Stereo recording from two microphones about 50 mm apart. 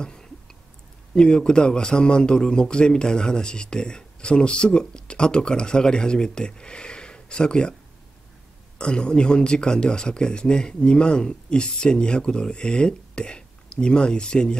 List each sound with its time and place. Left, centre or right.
0.0 s a sound: centre
1.1 s a man's voice: centre
8.7 s speech: centre